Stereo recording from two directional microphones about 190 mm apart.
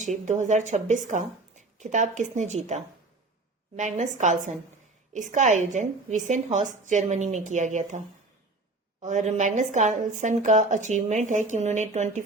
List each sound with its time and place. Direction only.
0.0 s speech: 40° right (ahead or behind)